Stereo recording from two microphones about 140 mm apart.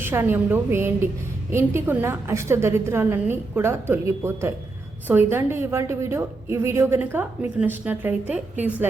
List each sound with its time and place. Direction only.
0.0 s a woman's voice: 15° right (ahead or behind)